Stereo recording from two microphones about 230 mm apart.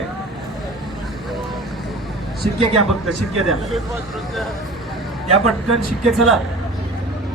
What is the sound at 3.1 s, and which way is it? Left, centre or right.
Speech, centre.